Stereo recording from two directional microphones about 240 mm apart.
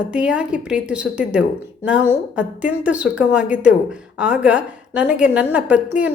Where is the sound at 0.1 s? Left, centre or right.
Centre.